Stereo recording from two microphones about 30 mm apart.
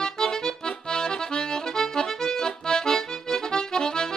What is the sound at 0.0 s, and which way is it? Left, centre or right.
Accordion, left.